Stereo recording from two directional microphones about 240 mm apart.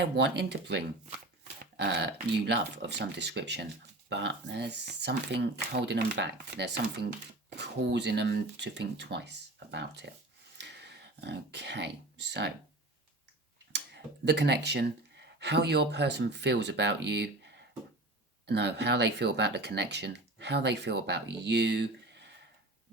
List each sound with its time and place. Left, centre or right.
0.0 s speech: right
10.6 s a sound: right
13.7 s speech: right